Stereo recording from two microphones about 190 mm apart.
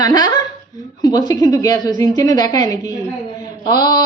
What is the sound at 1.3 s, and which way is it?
A man's voice, 20° left (ahead or behind).